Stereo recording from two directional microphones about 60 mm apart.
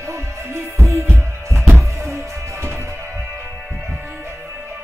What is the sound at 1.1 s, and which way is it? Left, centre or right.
Music, right.